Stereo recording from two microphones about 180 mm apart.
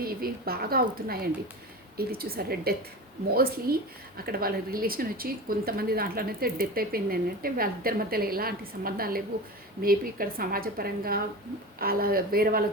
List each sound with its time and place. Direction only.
0.0 s a woman's voice: 55° right (ahead or behind)